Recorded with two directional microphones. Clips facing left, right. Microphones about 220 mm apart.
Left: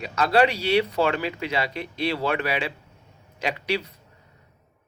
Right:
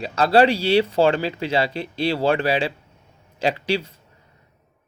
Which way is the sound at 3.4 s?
30° right (ahead or behind).